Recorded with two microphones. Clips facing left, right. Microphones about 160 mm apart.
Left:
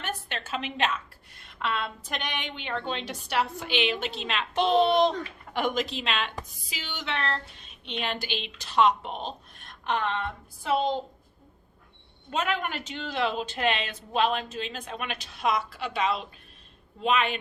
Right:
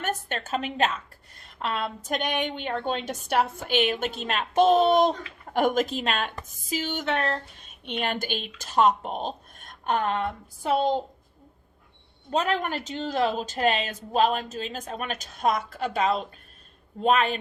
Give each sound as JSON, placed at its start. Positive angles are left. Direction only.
{"t": 0.0, "sound": "a woman's voice", "side_deg": -45}
{"t": 1.4, "sound": "a sound", "side_deg": -40}
{"t": 2.0, "sound": "a woman's voice", "side_deg": -45}
{"t": 12.3, "sound": "speech", "side_deg": -40}